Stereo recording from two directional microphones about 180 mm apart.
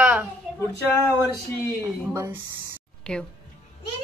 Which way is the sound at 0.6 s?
15° left (ahead or behind).